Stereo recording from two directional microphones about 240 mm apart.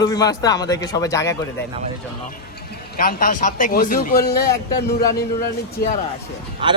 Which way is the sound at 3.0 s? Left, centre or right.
Left.